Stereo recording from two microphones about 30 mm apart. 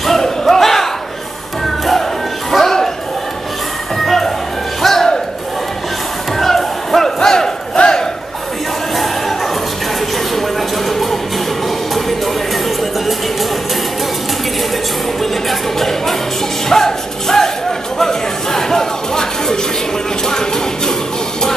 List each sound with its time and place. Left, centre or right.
0.5 s battle cry: centre
2.5 s music: centre
4.0 s music: centre
6.4 s crowd: centre
7.2 s battle cry: centre
7.8 s battle cry: left
16.6 s music: centre
17.9 s chatter: centre
20.2 s music: centre